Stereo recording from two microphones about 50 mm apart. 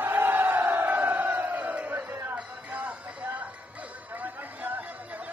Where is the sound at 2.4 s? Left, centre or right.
Right.